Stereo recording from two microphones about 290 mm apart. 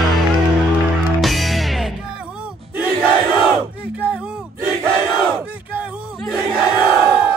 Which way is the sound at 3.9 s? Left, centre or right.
Centre.